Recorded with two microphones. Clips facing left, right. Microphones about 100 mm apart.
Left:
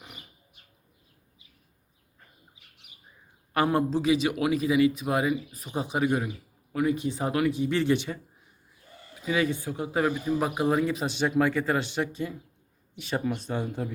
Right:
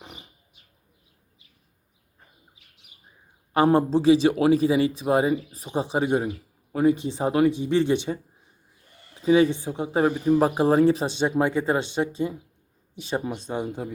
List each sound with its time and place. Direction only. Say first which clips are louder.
3.5 s a man's voice: right 5 dB; 25° right (ahead or behind)
9.2 s a man's voice: right 8 dB; 30° right (ahead or behind)
10.2 s a man's voice: right 6 dB; 40° right (ahead or behind); by 13.9 s 20° right (ahead or behind)